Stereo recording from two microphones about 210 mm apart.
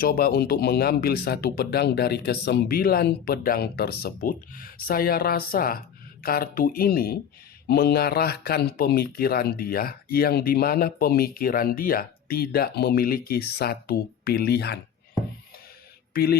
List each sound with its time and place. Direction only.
0.0 s speech: 45° left (ahead or behind)
16.1 s speech: 50° left (ahead or behind)